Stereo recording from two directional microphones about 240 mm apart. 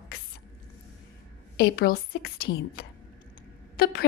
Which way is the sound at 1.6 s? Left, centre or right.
Left.